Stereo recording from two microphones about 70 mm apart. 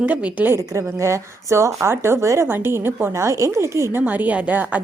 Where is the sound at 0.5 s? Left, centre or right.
Right.